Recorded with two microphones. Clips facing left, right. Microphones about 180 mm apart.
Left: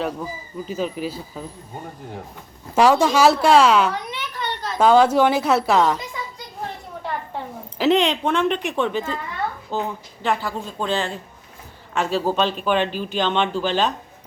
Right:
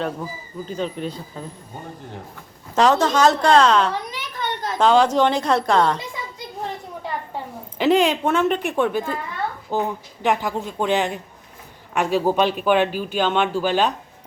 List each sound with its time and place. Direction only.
0.0 s speech: 5° left (ahead or behind)
2.7 s a woman's voice: 10° left (ahead or behind)
4.1 s a sound: 50° right (ahead or behind)
4.8 s a woman's voice: 10° left (ahead or behind)
7.8 s speech: centre (ahead or behind)